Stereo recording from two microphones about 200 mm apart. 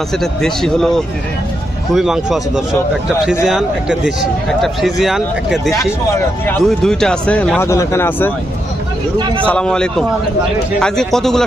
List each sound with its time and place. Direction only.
0.2 s a man's voice: centre (ahead or behind)
3.4 s a man's voice: centre (ahead or behind)
9.1 s a man's voice: 25° right (ahead or behind)
9.5 s a man's voice: 5° left (ahead or behind)